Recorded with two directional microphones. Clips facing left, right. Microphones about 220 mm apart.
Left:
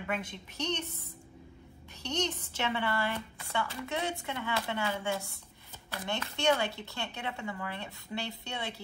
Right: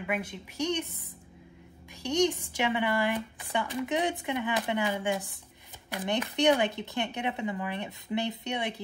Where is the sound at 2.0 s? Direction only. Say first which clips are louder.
Right 8 dB; 15° right (ahead or behind).